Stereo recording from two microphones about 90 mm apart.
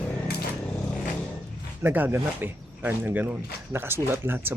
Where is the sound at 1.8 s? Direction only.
20° right (ahead or behind).